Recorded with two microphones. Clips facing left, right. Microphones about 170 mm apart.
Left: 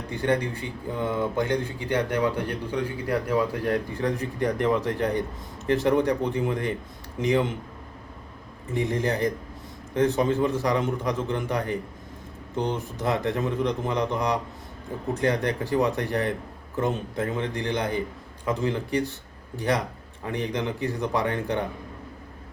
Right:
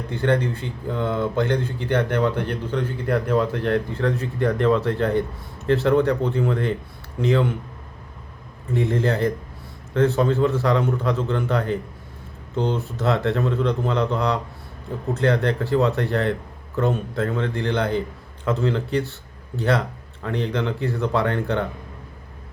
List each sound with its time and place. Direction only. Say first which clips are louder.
0.1 s speech: right 3 dB; 15° left (ahead or behind)
8.7 s speech: right 4 dB; 15° left (ahead or behind)